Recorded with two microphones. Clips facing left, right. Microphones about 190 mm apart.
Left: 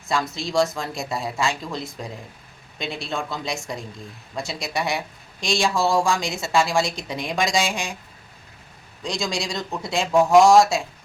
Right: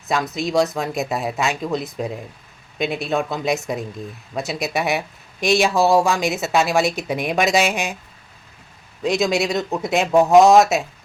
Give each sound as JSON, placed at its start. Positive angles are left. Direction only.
{"t": 0.1, "sound": "speech", "side_deg": -20}
{"t": 9.0, "sound": "speech", "side_deg": -20}